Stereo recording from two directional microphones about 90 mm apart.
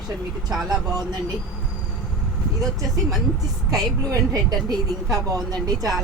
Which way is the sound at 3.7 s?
45° right (ahead or behind).